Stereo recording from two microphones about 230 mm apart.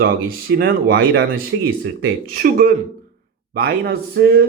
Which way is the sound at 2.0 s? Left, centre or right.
Right.